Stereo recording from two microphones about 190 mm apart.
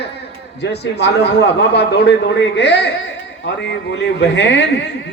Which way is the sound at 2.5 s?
65° left (ahead or behind).